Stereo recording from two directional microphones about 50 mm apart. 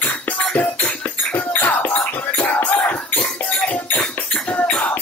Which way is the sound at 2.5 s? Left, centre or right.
Left.